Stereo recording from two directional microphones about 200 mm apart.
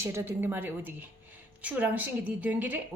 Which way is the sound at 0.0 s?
10° right (ahead or behind).